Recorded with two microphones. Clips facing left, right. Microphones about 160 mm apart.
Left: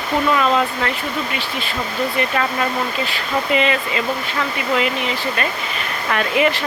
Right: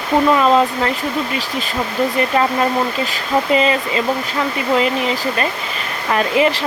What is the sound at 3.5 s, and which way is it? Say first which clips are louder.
Speech: right 2 dB; 35° right (ahead or behind).